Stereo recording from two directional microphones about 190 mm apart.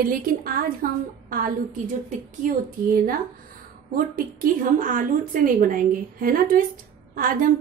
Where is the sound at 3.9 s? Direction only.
45° right (ahead or behind).